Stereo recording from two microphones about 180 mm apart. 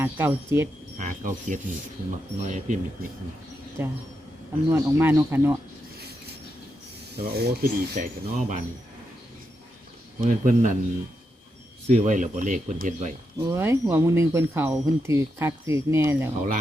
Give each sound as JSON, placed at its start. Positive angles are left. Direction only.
{"t": 0.0, "sound": "speech", "side_deg": -10}
{"t": 0.9, "sound": "speech", "side_deg": -45}
{"t": 3.8, "sound": "speech", "side_deg": -15}
{"t": 7.2, "sound": "speech", "side_deg": -60}
{"t": 10.2, "sound": "speech", "side_deg": -45}
{"t": 11.9, "sound": "speech", "side_deg": -45}
{"t": 13.4, "sound": "speech", "side_deg": -15}